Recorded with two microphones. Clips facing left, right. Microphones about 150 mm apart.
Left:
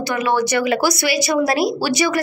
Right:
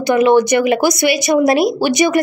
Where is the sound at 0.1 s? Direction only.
20° right (ahead or behind).